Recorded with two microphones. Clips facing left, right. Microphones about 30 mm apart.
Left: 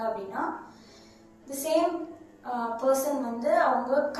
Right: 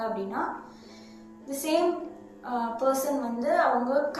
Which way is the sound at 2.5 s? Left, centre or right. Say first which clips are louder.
Right 1 dB; right.